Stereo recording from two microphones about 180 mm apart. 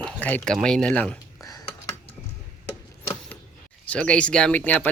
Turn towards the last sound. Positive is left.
turn(degrees=10)  # may be behind; listen again after turning